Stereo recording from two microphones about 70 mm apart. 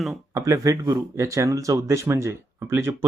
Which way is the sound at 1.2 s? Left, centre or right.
Right.